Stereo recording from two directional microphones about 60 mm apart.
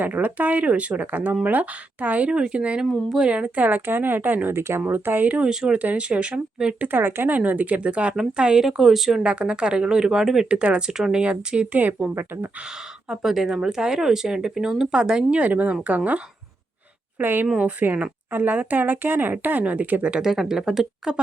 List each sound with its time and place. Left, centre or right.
0.0 s speech: right
5.4 s speech: centre
6.8 s speech: right; by 9.2 s centre
9.2 s speech: centre
11.8 s speech: right
13.1 s speech: centre
15.3 s speech: right
17.2 s speech: right; by 20.2 s centre
20.2 s speech: centre